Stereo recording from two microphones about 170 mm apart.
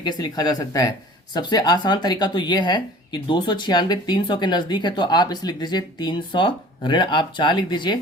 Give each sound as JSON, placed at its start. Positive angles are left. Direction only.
{"t": 0.0, "sound": "speech", "side_deg": 25}